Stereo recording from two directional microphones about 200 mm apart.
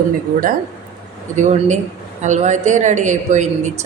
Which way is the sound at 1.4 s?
35° right (ahead or behind).